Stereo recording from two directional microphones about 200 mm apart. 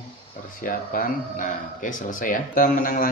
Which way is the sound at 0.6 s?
45° left (ahead or behind).